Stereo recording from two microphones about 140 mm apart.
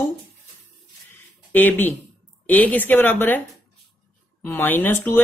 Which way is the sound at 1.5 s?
15° left (ahead or behind).